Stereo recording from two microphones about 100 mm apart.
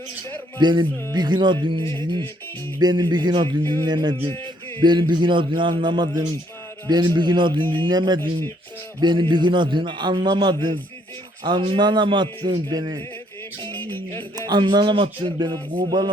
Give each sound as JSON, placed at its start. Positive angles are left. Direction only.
{"t": 0.6, "sound": "a man's voice", "side_deg": -50}
{"t": 2.8, "sound": "a man's voice", "side_deg": -50}
{"t": 3.6, "sound": "music", "side_deg": 20}
{"t": 3.8, "sound": "a man's voice", "side_deg": -45}
{"t": 13.6, "sound": "music", "side_deg": 20}
{"t": 14.3, "sound": "a man's voice", "side_deg": -45}